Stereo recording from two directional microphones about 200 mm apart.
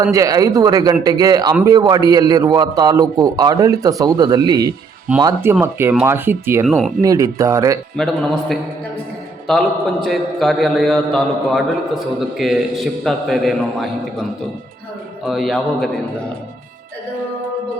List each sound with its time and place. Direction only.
0.0 s a man's voice: 15° right (ahead or behind)
6.7 s a man's voice: centre (ahead or behind)
7.0 s speech: 15° right (ahead or behind)
7.9 s a man's voice: centre (ahead or behind)
15.3 s a man's voice: centre (ahead or behind)